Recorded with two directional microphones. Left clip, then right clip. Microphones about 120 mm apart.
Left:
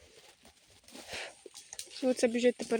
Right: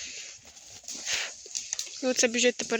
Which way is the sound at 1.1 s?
45° left (ahead or behind).